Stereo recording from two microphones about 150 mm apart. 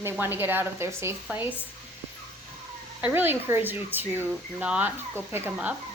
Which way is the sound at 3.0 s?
15° right (ahead or behind).